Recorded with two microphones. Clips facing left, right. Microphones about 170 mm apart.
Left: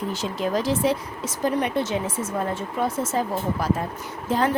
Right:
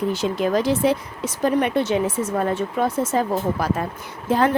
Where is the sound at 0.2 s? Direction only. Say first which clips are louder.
Right 4 dB; 65° right (ahead or behind).